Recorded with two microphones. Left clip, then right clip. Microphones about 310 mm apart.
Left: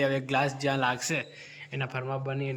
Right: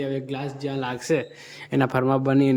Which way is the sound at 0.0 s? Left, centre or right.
Centre.